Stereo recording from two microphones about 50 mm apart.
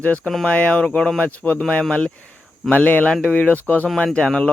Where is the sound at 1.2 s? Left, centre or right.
Left.